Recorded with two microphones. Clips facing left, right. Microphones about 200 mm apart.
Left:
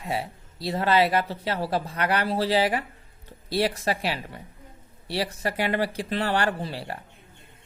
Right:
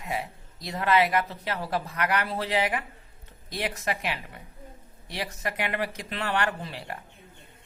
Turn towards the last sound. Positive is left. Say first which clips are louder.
# left 4 dB
turn(degrees=30)  # may be behind; listen again after turning